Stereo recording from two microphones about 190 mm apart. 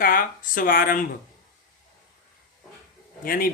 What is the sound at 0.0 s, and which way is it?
A man's voice, 45° left (ahead or behind).